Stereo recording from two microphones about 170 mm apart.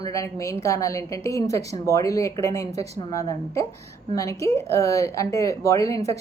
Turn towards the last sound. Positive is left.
turn(degrees=15)  # may be behind; listen again after turning